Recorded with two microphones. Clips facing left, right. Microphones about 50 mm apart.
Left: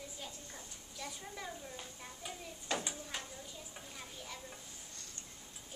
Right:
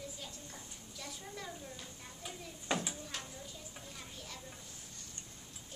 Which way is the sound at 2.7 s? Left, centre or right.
Centre.